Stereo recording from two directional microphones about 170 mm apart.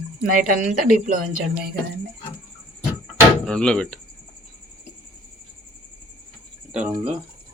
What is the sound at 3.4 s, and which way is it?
Speech, 5° left (ahead or behind).